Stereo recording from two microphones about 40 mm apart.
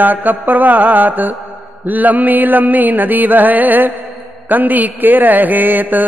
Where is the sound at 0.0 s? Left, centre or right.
Right.